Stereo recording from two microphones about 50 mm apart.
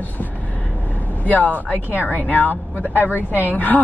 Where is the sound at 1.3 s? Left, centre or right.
Left.